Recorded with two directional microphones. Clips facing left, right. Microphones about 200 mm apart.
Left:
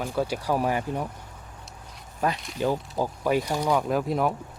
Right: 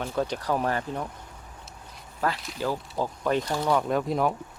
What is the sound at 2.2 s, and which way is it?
Speech, 15° left (ahead or behind).